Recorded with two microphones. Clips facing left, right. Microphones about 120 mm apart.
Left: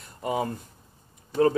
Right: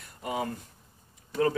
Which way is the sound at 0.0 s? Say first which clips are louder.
Left 4 dB; 30° left (ahead or behind).